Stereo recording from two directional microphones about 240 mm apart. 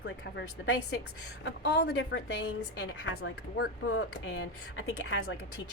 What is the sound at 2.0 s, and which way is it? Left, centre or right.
A woman's voice, left.